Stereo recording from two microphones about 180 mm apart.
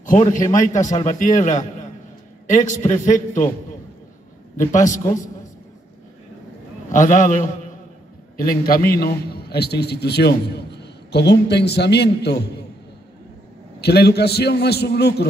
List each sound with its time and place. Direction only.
0.0 s a man's voice: 45° left (ahead or behind)
0.7 s a man's voice: 20° left (ahead or behind)
1.0 s a man's voice: 45° left (ahead or behind)
6.9 s a man's voice: 45° left (ahead or behind)
8.4 s a man's voice: 55° left (ahead or behind)
13.7 s a man's voice: 65° left (ahead or behind)